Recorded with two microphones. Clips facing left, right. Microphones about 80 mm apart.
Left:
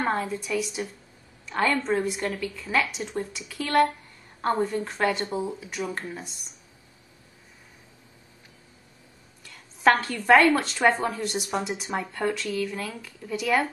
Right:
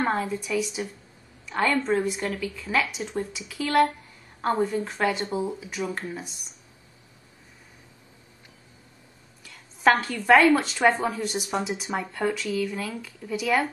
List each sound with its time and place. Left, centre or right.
0.0 s a woman's voice: centre
9.4 s a woman's voice: centre